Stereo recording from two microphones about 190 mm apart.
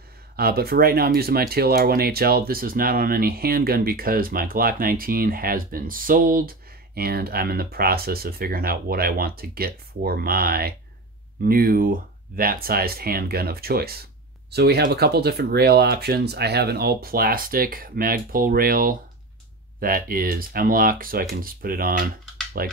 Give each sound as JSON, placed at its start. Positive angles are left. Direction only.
{"t": 0.4, "sound": "speech", "side_deg": -55}